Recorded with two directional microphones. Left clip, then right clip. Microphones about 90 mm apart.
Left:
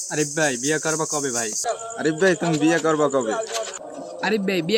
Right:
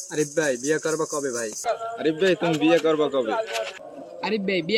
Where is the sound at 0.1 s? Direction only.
25° left (ahead or behind).